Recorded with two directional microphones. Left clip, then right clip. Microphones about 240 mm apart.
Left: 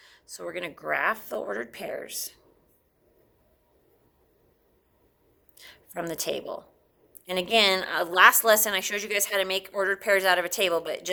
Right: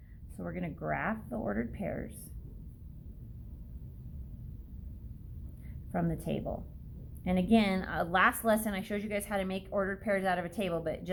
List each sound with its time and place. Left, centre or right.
0.3 s a woman's voice: left
5.6 s a woman's voice: left